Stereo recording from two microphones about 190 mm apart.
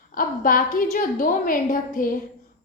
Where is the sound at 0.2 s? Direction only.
45° left (ahead or behind).